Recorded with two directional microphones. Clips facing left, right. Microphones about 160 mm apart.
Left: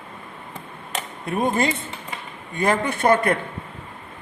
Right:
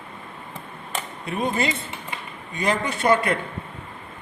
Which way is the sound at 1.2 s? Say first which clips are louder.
Left 3 dB; 50° left (ahead or behind).